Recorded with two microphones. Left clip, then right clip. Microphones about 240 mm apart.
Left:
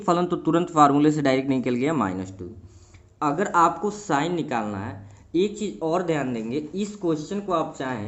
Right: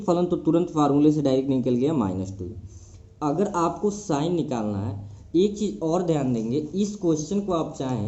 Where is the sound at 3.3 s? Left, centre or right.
Centre.